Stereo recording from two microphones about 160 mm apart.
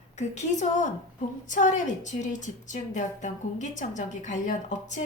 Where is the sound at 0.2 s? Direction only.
45° left (ahead or behind).